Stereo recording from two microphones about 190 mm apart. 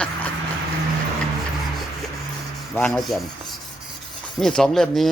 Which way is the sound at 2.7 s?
5° left (ahead or behind).